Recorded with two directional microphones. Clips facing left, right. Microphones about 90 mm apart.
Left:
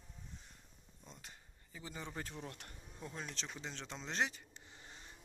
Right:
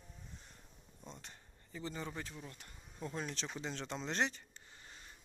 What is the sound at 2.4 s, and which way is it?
Speech, 65° left (ahead or behind).